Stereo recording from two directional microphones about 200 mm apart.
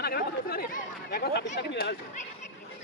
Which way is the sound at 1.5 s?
60° left (ahead or behind).